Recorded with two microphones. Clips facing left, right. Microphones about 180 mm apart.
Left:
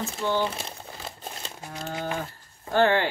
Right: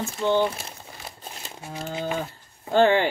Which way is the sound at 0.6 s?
30° left (ahead or behind).